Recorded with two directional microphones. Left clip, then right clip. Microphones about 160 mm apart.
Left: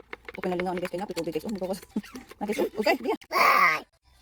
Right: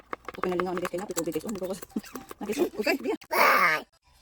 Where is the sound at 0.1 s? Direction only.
15° right (ahead or behind).